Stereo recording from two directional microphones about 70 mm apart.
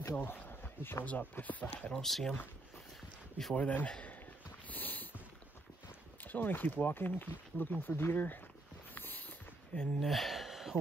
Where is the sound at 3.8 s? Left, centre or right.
Centre.